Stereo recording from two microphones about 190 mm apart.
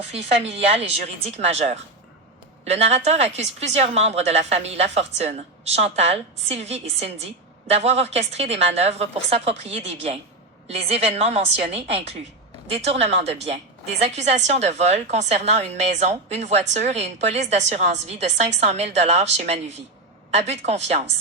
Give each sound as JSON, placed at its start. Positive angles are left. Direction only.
{"t": 0.1, "sound": "a woman's voice", "side_deg": -30}